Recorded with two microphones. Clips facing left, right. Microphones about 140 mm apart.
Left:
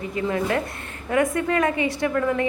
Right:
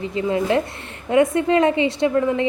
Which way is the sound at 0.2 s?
20° right (ahead or behind).